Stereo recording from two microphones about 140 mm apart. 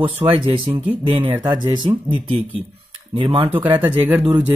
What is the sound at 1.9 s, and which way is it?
Speech, 40° right (ahead or behind).